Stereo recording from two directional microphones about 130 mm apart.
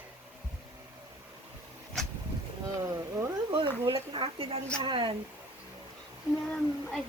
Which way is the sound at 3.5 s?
45° right (ahead or behind).